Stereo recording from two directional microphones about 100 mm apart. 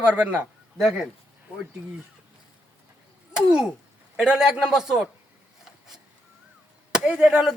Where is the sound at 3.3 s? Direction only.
5° right (ahead or behind).